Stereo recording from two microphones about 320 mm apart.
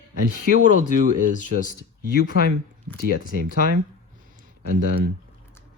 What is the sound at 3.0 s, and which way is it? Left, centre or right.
Speech, right.